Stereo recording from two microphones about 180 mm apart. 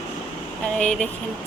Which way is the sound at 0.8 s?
5° left (ahead or behind).